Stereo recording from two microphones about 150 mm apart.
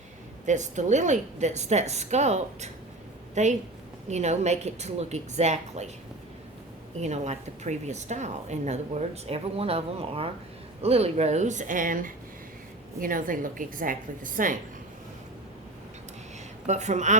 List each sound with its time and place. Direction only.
0.4 s speech: 55° right (ahead or behind)
7.0 s a woman's voice: 50° right (ahead or behind)
16.6 s speech: 50° right (ahead or behind)